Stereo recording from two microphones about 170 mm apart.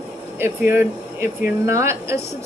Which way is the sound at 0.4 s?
10° right (ahead or behind).